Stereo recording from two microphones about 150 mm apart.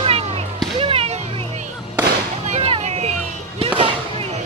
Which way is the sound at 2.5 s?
40° right (ahead or behind).